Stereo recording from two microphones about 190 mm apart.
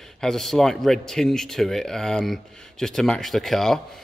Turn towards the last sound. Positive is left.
turn(degrees=0)  # may be behind; listen again after turning